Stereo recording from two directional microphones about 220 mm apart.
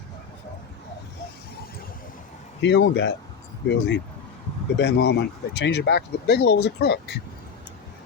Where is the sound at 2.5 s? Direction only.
50° left (ahead or behind).